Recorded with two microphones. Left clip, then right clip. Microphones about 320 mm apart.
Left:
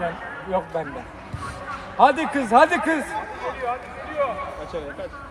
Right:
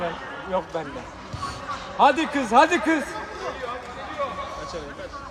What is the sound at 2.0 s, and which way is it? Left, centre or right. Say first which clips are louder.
Speech: left 1 dB; left.